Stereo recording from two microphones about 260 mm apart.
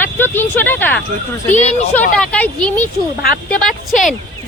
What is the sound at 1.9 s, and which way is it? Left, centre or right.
Speech, centre.